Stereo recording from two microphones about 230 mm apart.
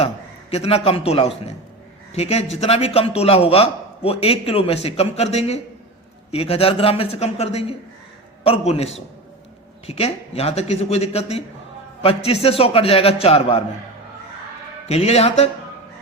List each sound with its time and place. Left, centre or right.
0.5 s a man's voice: left
14.8 s a man's voice: left